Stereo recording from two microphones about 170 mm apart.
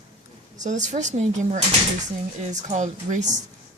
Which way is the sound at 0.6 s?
45° right (ahead or behind).